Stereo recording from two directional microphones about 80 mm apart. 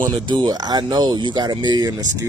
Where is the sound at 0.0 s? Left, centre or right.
Right.